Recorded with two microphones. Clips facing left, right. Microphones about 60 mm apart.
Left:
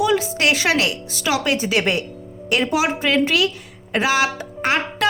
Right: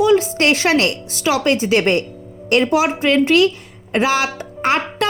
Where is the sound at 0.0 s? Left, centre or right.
Right.